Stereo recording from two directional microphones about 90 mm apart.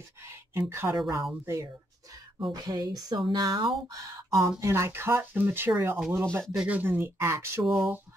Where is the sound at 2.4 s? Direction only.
45° right (ahead or behind).